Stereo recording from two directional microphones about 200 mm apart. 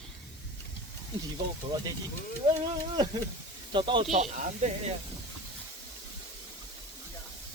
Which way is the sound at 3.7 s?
25° right (ahead or behind).